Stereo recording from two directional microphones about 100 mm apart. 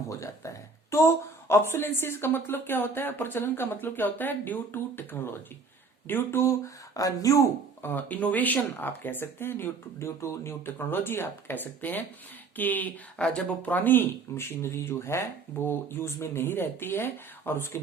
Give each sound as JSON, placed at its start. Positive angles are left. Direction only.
{"t": 0.1, "sound": "speech", "side_deg": 30}
{"t": 6.9, "sound": "speech", "side_deg": 35}
{"t": 7.8, "sound": "speech", "side_deg": 20}